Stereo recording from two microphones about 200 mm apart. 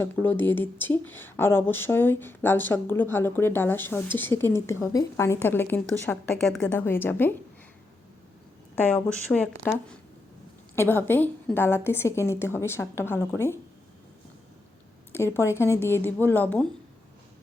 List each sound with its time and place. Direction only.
0.0 s speech: 10° left (ahead or behind)
8.7 s speech: 10° left (ahead or behind)
10.8 s speech: 10° left (ahead or behind)
15.1 s speech: 10° left (ahead or behind)